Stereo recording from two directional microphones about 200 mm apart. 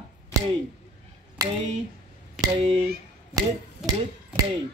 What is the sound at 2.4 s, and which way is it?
Speech, 25° right (ahead or behind).